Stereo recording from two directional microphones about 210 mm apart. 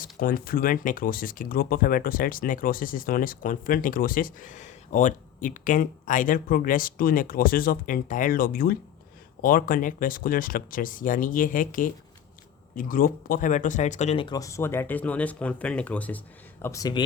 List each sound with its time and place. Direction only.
0.0 s speech: 40° left (ahead or behind); by 17.0 s 15° left (ahead or behind)